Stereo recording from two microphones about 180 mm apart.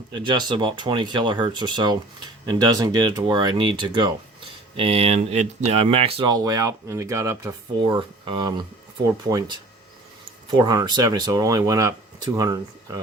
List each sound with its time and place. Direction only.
0.1 s speech: 25° right (ahead or behind)
10.5 s speech: 20° right (ahead or behind)